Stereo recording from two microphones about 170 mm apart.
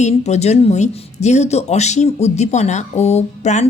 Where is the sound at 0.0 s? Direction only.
40° left (ahead or behind).